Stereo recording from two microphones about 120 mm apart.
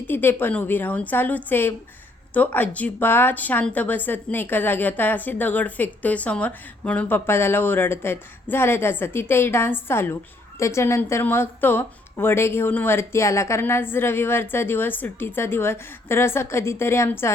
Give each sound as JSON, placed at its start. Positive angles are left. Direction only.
{"t": 0.1, "sound": "a woman's voice", "side_deg": 15}